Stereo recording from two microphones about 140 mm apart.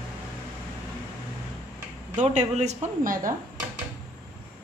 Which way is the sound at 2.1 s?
55° right (ahead or behind).